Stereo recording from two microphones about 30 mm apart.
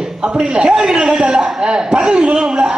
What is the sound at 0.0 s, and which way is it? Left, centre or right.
A woman's voice, right.